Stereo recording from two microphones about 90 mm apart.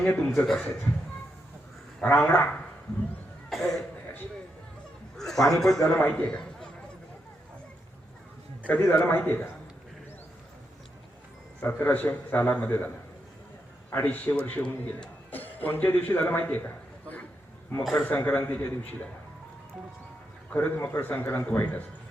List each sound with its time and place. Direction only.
0.1 s a man's voice: 25° left (ahead or behind)
0.3 s a man's voice: 5° left (ahead or behind)
2.0 s a man's voice: 15° left (ahead or behind)
3.5 s speech: centre (ahead or behind)
5.1 s chuckle: 5° left (ahead or behind)
5.5 s a man's voice: 5° left (ahead or behind)
8.6 s a man's voice: 15° left (ahead or behind)
11.6 s a man's voice: 25° left (ahead or behind)
14.0 s a man's voice: 20° left (ahead or behind)
20.5 s a man's voice: 20° left (ahead or behind)